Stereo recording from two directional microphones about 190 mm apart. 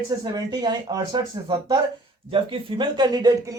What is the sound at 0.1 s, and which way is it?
Speech, 15° right (ahead or behind).